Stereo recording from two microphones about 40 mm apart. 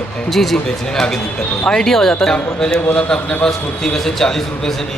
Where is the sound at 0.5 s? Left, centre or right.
Centre.